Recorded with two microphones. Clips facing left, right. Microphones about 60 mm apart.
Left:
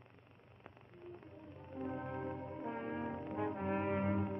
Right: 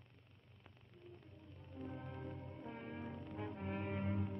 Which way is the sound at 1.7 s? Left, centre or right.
Left.